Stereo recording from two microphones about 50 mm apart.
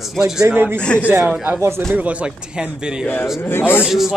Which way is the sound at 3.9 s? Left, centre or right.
Centre.